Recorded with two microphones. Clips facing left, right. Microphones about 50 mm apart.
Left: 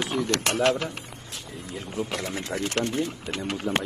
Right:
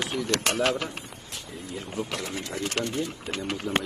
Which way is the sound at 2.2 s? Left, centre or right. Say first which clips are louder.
Left 2 dB; left.